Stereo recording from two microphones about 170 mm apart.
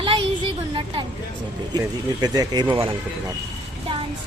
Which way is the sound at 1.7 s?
25° right (ahead or behind).